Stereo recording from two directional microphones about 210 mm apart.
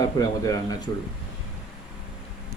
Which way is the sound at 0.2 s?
15° left (ahead or behind).